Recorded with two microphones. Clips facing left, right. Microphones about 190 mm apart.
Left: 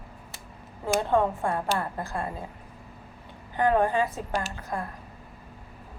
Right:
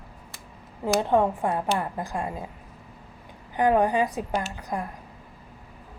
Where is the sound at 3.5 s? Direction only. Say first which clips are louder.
Right 2 dB; 15° right (ahead or behind).